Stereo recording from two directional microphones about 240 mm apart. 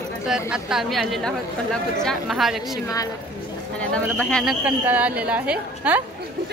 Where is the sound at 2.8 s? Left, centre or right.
Centre.